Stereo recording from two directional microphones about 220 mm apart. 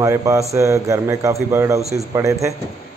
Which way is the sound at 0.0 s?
15° right (ahead or behind).